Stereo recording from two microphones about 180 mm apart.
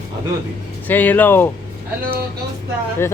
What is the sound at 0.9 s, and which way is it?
Speech, 10° left (ahead or behind).